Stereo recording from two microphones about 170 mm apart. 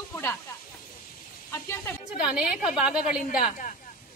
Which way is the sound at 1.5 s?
15° left (ahead or behind).